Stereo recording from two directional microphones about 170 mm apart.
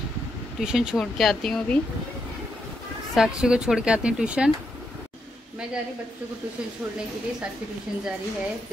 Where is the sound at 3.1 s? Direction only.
5° right (ahead or behind).